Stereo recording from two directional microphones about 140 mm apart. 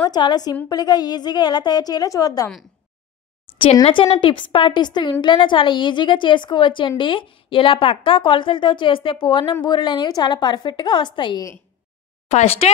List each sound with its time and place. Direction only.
0.0 s a woman's voice: 30° left (ahead or behind)
3.8 s speech: 45° left (ahead or behind)
12.3 s speech: 50° left (ahead or behind)